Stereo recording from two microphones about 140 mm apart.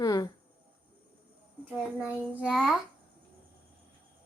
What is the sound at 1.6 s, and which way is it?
A child's voice, 5° right (ahead or behind).